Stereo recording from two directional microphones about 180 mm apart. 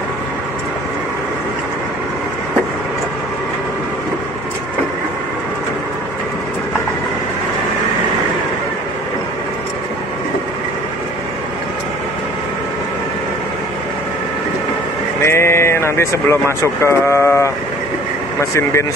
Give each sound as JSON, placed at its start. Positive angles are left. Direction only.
{"t": 15.2, "sound": "speech", "side_deg": 15}
{"t": 18.5, "sound": "speech", "side_deg": 15}